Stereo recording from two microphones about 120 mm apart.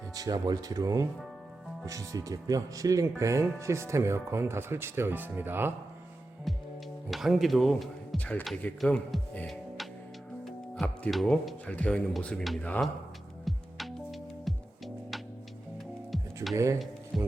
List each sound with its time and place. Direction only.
0.1 s speech: 30° right (ahead or behind)
6.5 s music: centre (ahead or behind)
7.1 s speech: centre (ahead or behind)
8.2 s speech: 10° left (ahead or behind)
8.8 s speech: centre (ahead or behind)
9.5 s music: centre (ahead or behind)
10.4 s speech: 5° left (ahead or behind)
11.6 s speech: 10° left (ahead or behind)
13.4 s music: centre (ahead or behind)
16.1 s music: centre (ahead or behind)
17.1 s speech: centre (ahead or behind)